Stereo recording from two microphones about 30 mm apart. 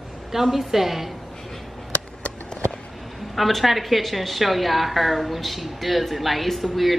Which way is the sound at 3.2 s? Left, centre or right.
Centre.